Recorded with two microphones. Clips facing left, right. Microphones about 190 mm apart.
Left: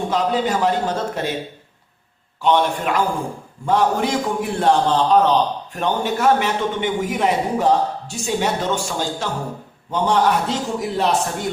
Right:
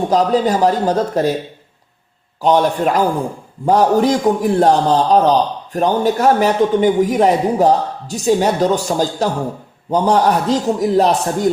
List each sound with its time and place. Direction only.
0.1 s a man's voice: 40° right (ahead or behind)
2.4 s a man's voice: 40° right (ahead or behind)